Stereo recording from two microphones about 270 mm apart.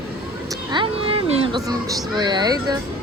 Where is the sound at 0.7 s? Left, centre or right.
Centre.